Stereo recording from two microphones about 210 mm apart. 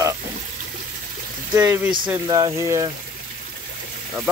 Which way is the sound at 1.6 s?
10° right (ahead or behind).